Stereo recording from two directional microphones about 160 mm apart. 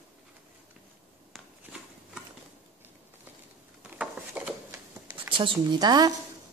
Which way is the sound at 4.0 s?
5° right (ahead or behind).